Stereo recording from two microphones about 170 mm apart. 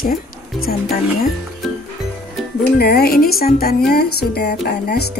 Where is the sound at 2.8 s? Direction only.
65° left (ahead or behind).